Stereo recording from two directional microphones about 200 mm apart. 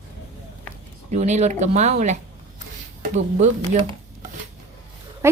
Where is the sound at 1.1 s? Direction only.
35° right (ahead or behind).